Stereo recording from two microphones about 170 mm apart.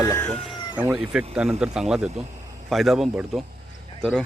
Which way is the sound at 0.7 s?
10° right (ahead or behind).